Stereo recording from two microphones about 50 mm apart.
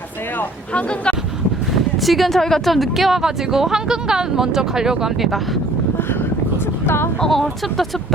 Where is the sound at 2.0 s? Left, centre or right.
Centre.